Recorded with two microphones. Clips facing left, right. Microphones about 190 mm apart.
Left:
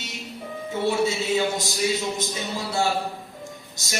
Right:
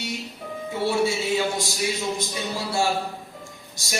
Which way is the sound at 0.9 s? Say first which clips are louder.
Even; 20° left (ahead or behind).